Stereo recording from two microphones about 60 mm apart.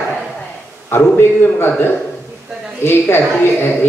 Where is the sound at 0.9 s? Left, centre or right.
Left.